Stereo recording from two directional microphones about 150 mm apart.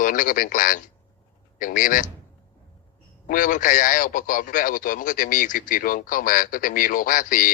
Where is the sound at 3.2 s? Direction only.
65° left (ahead or behind).